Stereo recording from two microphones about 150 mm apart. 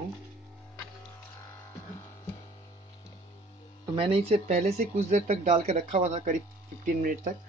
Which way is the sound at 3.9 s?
40° right (ahead or behind).